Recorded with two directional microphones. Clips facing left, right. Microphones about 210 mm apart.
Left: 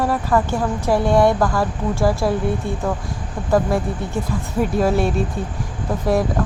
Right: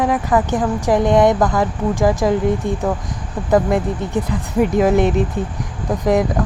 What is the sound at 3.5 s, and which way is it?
A woman's voice, 20° right (ahead or behind).